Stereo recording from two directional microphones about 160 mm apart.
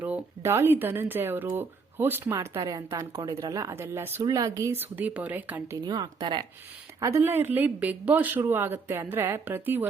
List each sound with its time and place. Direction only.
0.0 s speech: 15° right (ahead or behind)
5.8 s a woman's voice: 25° right (ahead or behind)
7.0 s speech: 15° right (ahead or behind)